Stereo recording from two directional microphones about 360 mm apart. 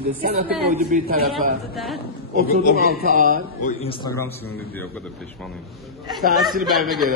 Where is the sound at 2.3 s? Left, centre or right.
Left.